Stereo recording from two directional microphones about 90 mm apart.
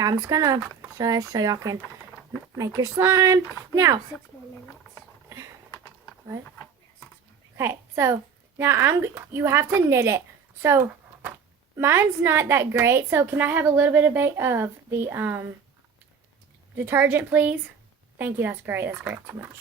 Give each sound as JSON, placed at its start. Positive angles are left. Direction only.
{"t": 0.0, "sound": "speech", "side_deg": -40}
{"t": 7.5, "sound": "a child's voice", "side_deg": -30}
{"t": 16.7, "sound": "a woman's voice", "side_deg": -20}